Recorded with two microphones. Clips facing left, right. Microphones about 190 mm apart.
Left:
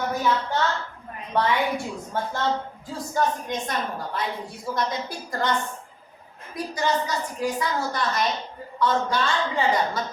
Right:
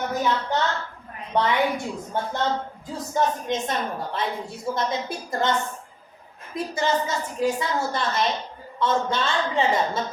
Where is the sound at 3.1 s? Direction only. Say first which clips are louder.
Right 2 dB; 25° right (ahead or behind).